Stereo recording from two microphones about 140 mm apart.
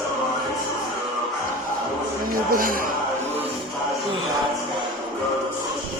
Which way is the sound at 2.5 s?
80° right.